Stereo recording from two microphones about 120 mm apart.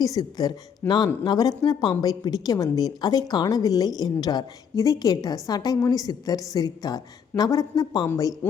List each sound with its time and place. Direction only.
0.0 s speech: 30° left (ahead or behind)